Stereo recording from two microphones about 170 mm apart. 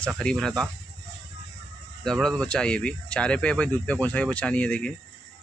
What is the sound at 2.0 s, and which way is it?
Speech, 5° left (ahead or behind).